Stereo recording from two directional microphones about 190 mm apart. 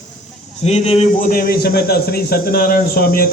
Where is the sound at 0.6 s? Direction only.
35° left (ahead or behind).